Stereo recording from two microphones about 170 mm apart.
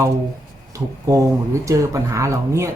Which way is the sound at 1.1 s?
20° right (ahead or behind).